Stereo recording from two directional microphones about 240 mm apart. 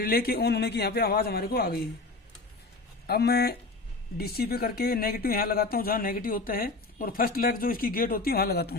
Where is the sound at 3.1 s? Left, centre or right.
Left.